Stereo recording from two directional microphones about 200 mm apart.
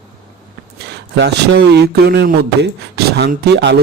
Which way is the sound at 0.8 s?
55° right (ahead or behind).